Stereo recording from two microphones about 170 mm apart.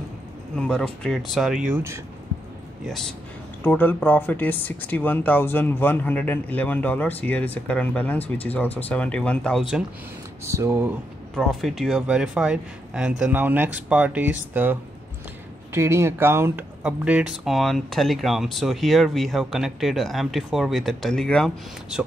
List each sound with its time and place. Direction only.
0.6 s speech: 5° left (ahead or behind); by 2.0 s 15° right (ahead or behind)
2.9 s speech: 5° left (ahead or behind)
10.4 s speech: 15° right (ahead or behind)
11.3 s speech: centre (ahead or behind)